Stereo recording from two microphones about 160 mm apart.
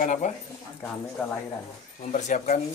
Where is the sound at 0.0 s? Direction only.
50° left (ahead or behind).